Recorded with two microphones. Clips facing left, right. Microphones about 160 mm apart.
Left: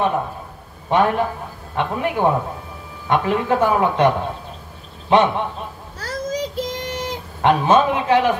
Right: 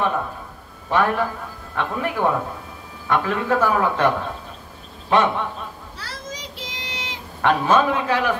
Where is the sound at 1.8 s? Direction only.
20° left (ahead or behind).